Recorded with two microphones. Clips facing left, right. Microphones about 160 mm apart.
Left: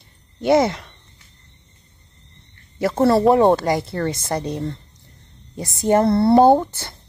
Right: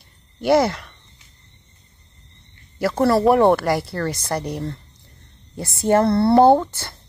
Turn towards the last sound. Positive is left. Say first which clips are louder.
# even
turn(degrees=20)  # may be behind; listen again after turning